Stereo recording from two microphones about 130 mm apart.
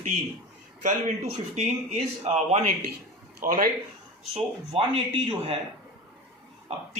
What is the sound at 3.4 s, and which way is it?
Speech, 90° right.